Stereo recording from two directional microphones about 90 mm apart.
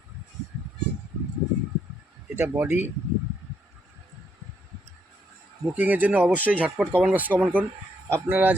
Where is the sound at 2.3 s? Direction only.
25° right (ahead or behind).